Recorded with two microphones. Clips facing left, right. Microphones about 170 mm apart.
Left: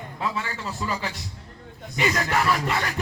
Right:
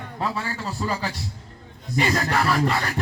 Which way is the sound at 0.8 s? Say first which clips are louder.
Right 2 dB; 40° right (ahead or behind).